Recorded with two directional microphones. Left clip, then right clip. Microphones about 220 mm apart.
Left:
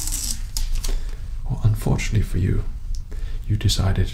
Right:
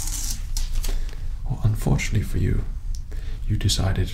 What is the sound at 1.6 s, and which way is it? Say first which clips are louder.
Speech: even; 10° left (ahead or behind).